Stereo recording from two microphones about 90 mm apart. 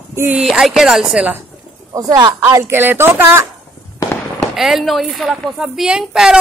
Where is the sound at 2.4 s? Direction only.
30° right (ahead or behind).